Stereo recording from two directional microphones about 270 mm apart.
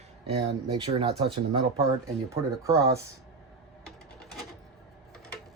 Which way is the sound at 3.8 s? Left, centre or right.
Centre.